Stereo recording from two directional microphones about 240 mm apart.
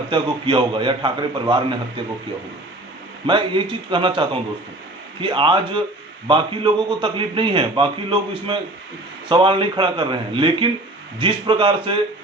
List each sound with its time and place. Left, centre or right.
0.1 s a man's voice: centre
3.2 s a man's voice: centre